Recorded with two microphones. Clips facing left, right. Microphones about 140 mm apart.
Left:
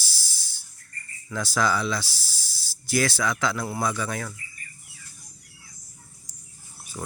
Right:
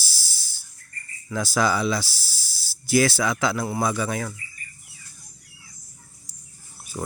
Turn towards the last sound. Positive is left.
turn(degrees=-10)  # may be behind; listen again after turning